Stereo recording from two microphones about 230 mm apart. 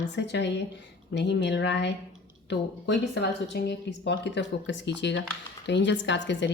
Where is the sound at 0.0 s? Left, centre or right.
Left.